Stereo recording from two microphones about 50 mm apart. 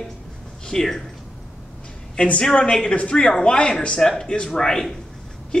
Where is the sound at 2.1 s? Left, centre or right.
Left.